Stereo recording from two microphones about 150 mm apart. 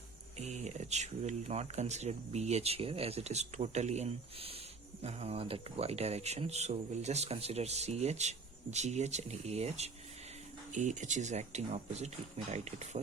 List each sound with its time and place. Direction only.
0.3 s speech: 50° right (ahead or behind)